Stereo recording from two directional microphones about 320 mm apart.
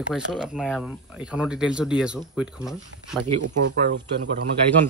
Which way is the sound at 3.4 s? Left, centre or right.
Right.